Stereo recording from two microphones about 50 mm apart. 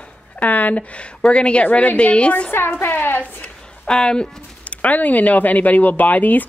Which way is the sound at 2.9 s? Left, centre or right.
Left.